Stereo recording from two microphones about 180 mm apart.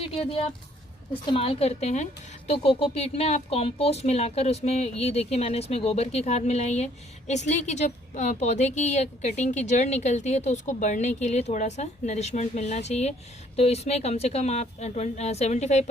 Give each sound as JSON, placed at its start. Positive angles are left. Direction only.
{"t": 0.0, "sound": "speech", "side_deg": 30}